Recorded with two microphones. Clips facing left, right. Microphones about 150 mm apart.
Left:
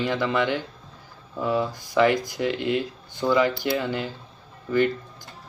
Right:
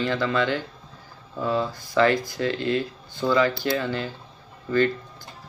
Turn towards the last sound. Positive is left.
turn(degrees=15)  # may be behind; listen again after turning